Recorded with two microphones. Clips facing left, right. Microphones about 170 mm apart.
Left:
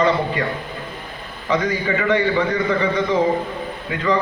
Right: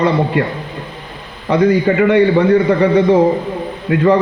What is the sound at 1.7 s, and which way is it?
A man's voice, 60° right (ahead or behind).